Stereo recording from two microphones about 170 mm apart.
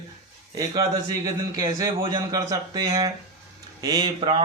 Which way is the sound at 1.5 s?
20° right (ahead or behind).